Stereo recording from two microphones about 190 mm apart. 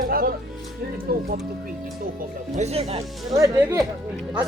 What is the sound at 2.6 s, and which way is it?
Speech, 35° right (ahead or behind).